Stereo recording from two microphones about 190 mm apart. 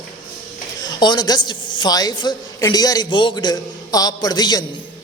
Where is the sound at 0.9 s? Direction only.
20° left (ahead or behind).